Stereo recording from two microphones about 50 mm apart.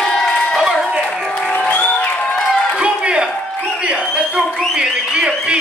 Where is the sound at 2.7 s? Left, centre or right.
Right.